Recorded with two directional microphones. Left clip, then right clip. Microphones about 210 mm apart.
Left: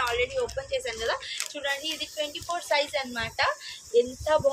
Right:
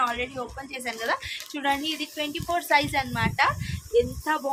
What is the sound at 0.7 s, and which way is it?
Child singing, 35° right (ahead or behind).